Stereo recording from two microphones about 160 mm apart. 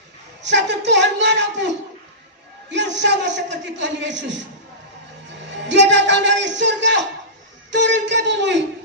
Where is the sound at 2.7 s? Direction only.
90° right.